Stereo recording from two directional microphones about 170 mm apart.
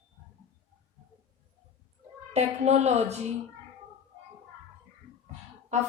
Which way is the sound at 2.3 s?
40° right (ahead or behind).